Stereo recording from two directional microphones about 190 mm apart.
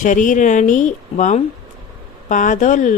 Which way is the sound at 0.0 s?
40° left (ahead or behind).